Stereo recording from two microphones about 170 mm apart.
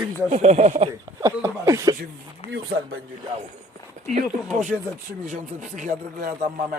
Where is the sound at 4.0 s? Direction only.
45° right (ahead or behind).